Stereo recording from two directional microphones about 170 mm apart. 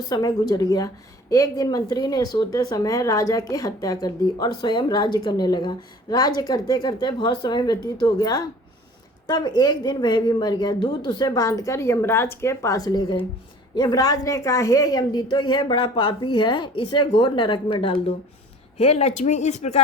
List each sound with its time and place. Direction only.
0.1 s speech: 25° left (ahead or behind); by 19.8 s 40° left (ahead or behind)